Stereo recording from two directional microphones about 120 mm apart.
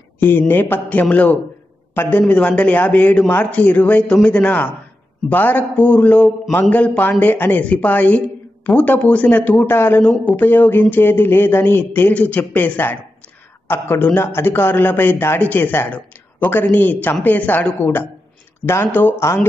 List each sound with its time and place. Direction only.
0.2 s speech: 15° left (ahead or behind)